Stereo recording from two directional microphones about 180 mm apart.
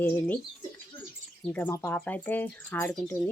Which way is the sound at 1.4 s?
10° left (ahead or behind).